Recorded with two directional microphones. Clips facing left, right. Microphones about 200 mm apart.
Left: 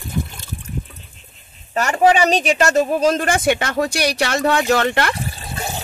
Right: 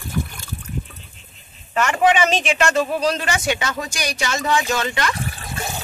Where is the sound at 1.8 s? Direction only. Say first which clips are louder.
Left 2 dB; 35° left (ahead or behind); by 5.1 s 60° left (ahead or behind).